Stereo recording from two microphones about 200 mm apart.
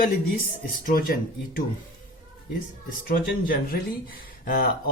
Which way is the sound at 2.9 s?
45° left (ahead or behind).